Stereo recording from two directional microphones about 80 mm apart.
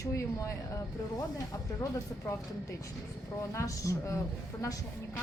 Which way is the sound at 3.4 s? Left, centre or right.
Left.